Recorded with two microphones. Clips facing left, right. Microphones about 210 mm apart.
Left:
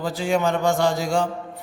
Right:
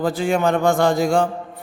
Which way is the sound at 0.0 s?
55° right (ahead or behind).